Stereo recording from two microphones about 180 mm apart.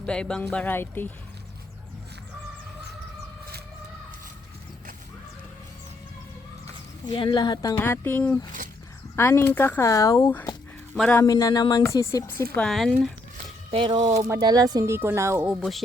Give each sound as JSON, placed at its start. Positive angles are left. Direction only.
{"t": 0.0, "sound": "speech", "side_deg": 5}
{"t": 7.1, "sound": "speech", "side_deg": 25}
{"t": 10.9, "sound": "speech", "side_deg": 5}
{"t": 11.2, "sound": "speech", "side_deg": 20}
{"t": 12.5, "sound": "speech", "side_deg": 0}
{"t": 13.7, "sound": "speech", "side_deg": -25}
{"t": 13.9, "sound": "speech", "side_deg": -40}
{"t": 14.3, "sound": "speech", "side_deg": -20}